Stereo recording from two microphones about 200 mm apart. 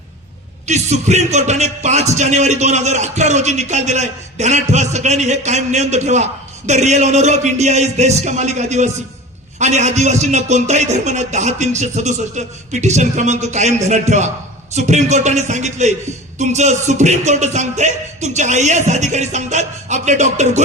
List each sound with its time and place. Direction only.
0.6 s a man's voice: 35° right (ahead or behind)